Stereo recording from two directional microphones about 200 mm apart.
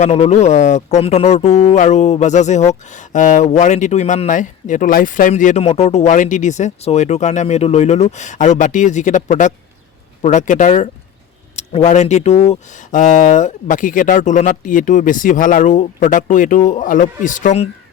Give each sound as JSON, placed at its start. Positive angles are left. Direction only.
{"t": 0.0, "sound": "speech", "side_deg": 35}